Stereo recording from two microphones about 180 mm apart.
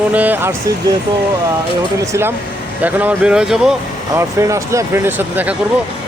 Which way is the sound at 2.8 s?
10° right (ahead or behind).